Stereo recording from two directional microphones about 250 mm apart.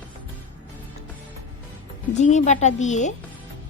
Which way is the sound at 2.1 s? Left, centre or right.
Left.